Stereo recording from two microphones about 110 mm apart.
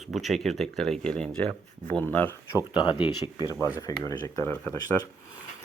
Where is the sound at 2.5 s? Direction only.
45° left (ahead or behind); by 4.5 s 30° left (ahead or behind).